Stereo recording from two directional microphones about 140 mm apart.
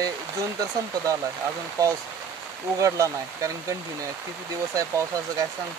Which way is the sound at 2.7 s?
20° right (ahead or behind).